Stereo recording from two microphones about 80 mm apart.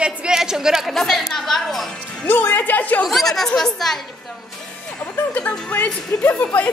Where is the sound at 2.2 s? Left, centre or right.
Left.